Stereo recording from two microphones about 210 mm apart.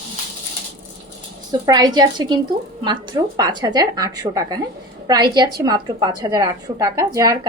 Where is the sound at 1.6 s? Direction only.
20° right (ahead or behind).